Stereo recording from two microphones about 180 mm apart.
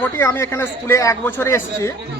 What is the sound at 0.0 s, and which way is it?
A man's voice, 15° left (ahead or behind).